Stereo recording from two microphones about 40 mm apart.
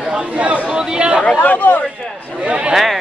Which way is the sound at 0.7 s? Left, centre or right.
Right.